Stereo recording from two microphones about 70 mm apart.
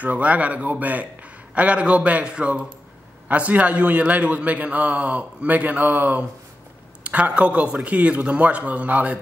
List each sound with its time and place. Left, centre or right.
0.0 s a man's voice: right